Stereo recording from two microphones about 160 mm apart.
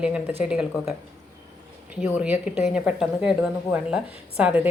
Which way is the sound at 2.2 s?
5° right (ahead or behind).